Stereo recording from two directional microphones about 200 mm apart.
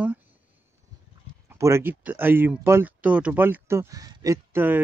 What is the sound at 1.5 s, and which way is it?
Speech, 15° right (ahead or behind).